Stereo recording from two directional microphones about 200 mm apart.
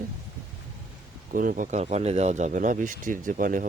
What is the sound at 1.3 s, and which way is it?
Speech, 45° right (ahead or behind).